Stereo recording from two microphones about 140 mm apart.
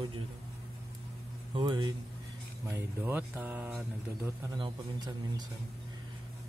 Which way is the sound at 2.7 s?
15° right (ahead or behind).